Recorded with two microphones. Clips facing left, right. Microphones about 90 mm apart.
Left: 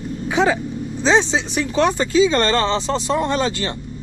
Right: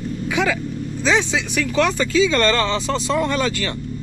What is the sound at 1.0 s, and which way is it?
Speech, 25° left (ahead or behind).